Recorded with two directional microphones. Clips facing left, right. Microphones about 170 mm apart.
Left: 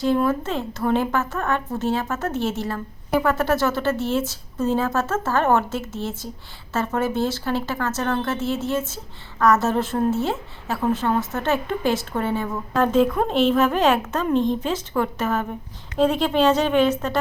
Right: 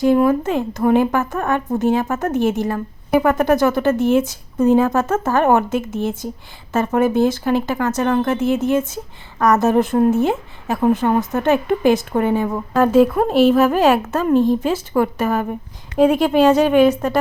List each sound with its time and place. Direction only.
0.0 s speech: 15° right (ahead or behind)